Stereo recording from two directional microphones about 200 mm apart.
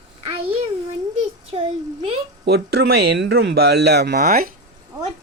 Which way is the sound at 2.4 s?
55° right (ahead or behind).